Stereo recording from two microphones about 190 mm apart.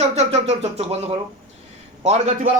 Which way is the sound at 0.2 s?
35° right (ahead or behind).